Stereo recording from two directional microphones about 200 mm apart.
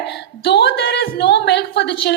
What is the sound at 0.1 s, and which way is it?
A woman's voice, 55° left (ahead or behind).